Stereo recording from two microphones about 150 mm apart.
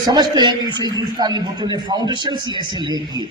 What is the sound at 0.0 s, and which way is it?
A woman's voice, 25° right (ahead or behind).